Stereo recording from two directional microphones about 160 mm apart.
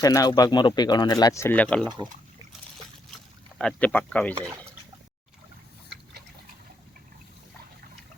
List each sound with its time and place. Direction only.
0.0 s speech: 20° left (ahead or behind)
3.6 s speech: 5° left (ahead or behind)